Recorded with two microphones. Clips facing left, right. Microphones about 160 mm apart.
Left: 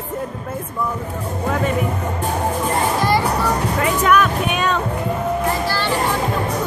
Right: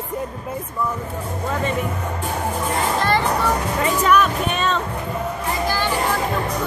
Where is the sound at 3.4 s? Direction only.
Centre (ahead or behind).